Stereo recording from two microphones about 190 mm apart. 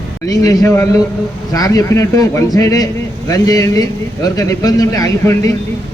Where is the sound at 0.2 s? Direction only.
20° left (ahead or behind).